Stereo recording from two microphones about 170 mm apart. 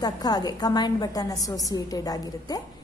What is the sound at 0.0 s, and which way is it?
A woman's voice, 25° left (ahead or behind).